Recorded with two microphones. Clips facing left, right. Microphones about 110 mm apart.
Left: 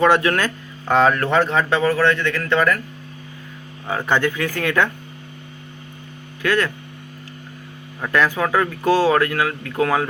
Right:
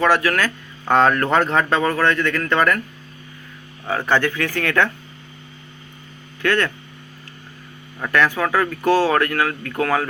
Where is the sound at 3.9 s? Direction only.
15° left (ahead or behind).